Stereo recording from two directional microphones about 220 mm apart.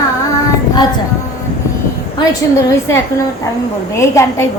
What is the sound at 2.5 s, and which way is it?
Child singing, 15° left (ahead or behind).